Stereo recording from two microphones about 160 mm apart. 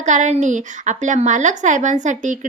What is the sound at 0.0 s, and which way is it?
A woman's voice, 50° right (ahead or behind).